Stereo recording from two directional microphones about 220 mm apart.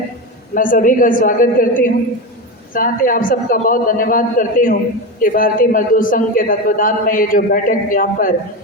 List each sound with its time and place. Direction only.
0.5 s a man's voice: 40° left (ahead or behind)